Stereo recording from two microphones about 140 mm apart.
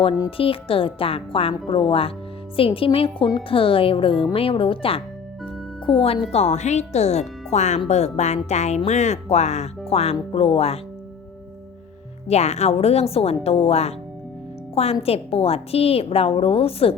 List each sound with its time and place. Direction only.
0.0 s a woman's voice: 40° left (ahead or behind)
6.3 s a woman's voice: 55° left (ahead or behind)
12.3 s a woman's voice: 50° left (ahead or behind)
15.0 s a woman's voice: 45° left (ahead or behind)